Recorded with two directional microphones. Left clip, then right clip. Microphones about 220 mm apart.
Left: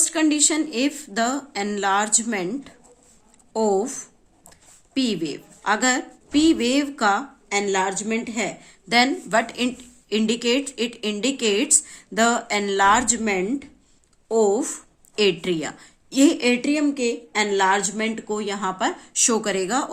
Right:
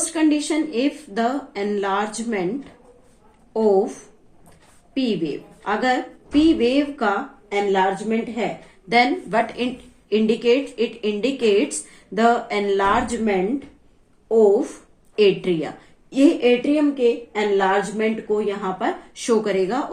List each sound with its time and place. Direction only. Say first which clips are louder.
0.0 s a woman's voice: even; 45° left (ahead or behind)
3.5 s a woman's voice: right 3 dB; 45° left (ahead or behind)